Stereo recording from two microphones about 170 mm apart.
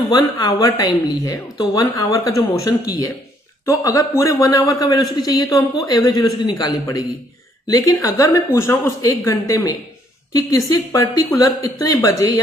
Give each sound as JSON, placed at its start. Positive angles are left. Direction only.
{"t": 0.1, "sound": "a woman's voice", "side_deg": 20}